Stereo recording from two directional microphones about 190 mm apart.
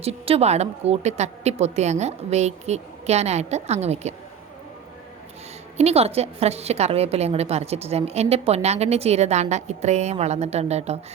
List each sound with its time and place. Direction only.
0.0 s a woman's voice: 30° right (ahead or behind)
5.7 s a woman's voice: 35° right (ahead or behind)